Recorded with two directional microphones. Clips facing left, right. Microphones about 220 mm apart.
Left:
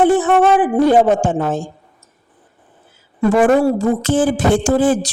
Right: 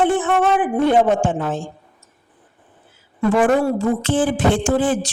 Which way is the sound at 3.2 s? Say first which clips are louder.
Left 3 dB; 35° left (ahead or behind).